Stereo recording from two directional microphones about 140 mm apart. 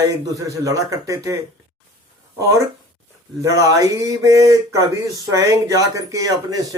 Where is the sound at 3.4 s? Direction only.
20° right (ahead or behind).